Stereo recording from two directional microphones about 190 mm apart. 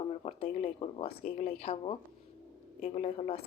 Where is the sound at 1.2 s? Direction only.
40° left (ahead or behind).